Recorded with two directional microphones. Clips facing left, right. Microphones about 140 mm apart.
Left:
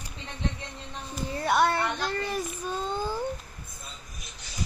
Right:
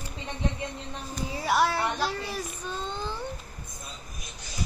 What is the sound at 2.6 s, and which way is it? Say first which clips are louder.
Speech: left 3 dB; 10° left (ahead or behind).